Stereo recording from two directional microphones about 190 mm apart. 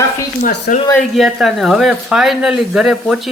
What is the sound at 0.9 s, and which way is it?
Speech, centre (ahead or behind).